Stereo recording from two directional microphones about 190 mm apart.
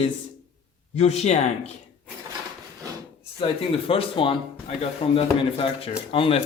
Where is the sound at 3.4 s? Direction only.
30° left (ahead or behind).